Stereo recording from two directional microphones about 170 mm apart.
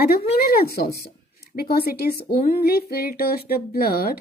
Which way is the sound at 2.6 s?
65° left (ahead or behind).